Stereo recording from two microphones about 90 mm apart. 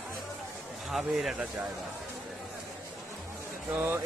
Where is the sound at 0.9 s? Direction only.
Centre (ahead or behind).